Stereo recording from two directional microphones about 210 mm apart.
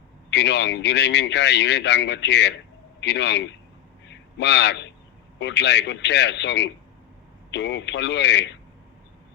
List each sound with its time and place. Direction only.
0.3 s a man's voice: 55° left (ahead or behind)